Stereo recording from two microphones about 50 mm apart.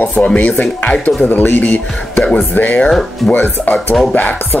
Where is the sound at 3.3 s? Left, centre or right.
Left.